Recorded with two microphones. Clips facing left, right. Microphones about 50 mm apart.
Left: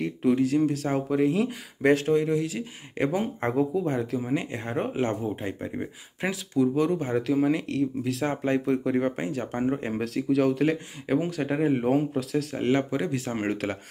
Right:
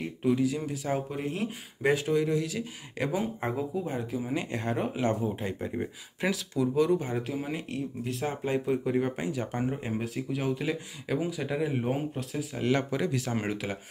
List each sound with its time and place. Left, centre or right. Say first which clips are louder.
0.0 s speech: left 3 dB; left
1.2 s speech: left 9 dB; left
1.9 s speech: left 5 dB; left
2.1 s speech: left 3 dB; left
4.2 s speech: left 3 dB; left
4.7 s speech: left 3 dB; left
7.0 s speech: left 5 dB; left
7.3 s speech: left 9 dB; left
8.5 s speech: left 3 dB; left
9.8 s speech: left 4 dB; left
10.0 s speech: left 10 dB; left
11.1 s speech: left 4 dB; left
11.7 s speech: left 7 dB; left
12.7 s speech: left 2 dB; left